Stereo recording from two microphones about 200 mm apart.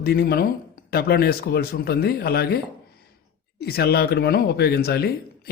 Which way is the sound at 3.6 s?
50° left (ahead or behind).